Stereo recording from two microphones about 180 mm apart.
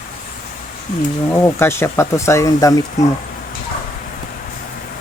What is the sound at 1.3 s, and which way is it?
Speech, 15° left (ahead or behind).